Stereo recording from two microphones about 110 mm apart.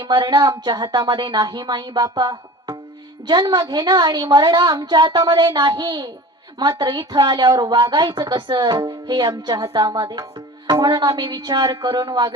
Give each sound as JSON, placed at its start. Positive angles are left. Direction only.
{"t": 0.0, "sound": "a woman's voice", "side_deg": -45}